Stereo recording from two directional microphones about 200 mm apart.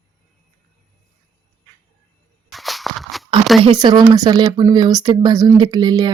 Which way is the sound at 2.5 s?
Centre (ahead or behind).